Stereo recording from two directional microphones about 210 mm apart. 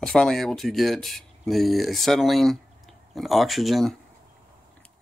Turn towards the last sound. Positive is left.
turn(degrees=0)  # may be behind; listen again after turning